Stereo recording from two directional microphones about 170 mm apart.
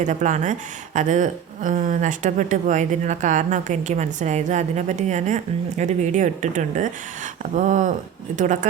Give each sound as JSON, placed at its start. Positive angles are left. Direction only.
{"t": 0.0, "sound": "speech", "side_deg": -45}